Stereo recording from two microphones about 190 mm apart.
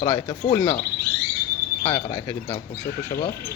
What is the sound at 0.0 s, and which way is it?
Speech, 20° left (ahead or behind).